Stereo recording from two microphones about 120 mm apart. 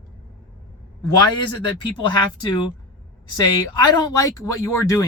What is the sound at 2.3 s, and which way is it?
Speech, 40° left (ahead or behind).